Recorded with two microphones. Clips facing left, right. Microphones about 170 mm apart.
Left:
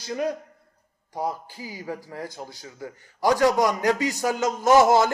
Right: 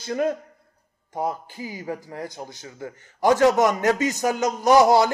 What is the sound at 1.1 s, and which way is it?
A man's voice, 20° right (ahead or behind).